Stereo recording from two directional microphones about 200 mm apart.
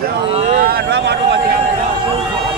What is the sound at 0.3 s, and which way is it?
Vehicle, 35° right (ahead or behind).